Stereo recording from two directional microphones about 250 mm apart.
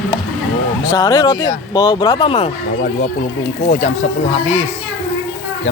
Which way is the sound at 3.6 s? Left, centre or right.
Left.